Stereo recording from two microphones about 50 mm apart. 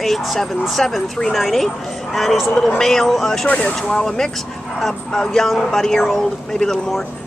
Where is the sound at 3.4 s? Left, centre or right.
Left.